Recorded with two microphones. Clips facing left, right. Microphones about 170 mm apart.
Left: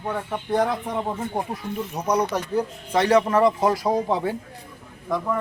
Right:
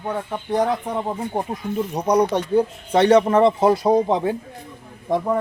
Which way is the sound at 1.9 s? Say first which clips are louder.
Right 5 dB; 35° right (ahead or behind).